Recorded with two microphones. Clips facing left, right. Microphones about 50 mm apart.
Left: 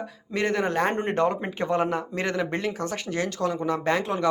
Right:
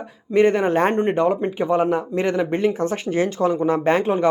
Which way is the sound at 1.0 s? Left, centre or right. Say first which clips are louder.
Right 5 dB; centre.